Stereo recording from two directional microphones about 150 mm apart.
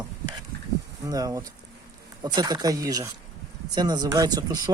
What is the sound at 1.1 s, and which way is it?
Speech, 25° right (ahead or behind).